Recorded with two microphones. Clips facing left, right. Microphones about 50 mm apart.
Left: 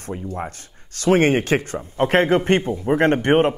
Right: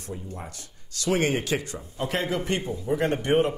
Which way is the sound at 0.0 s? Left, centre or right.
Left.